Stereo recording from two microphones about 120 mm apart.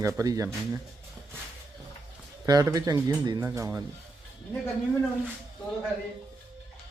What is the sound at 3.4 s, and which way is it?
Speech, 20° right (ahead or behind).